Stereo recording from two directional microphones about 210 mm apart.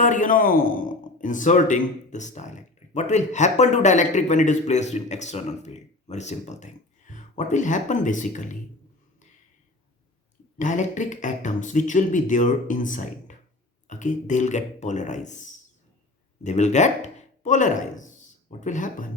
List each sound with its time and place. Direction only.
0.0 s a man's voice: 35° left (ahead or behind)
10.6 s a man's voice: 35° left (ahead or behind)